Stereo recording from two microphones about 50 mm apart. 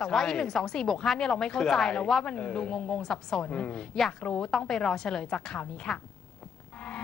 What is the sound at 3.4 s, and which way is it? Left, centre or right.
Speech, left.